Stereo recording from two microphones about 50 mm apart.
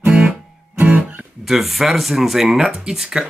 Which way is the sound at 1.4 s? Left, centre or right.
Centre.